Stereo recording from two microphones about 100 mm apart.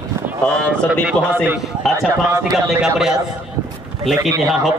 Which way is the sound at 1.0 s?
20° right (ahead or behind).